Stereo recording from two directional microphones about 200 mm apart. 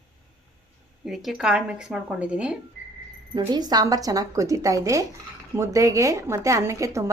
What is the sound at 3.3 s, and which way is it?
A woman's voice, 20° right (ahead or behind).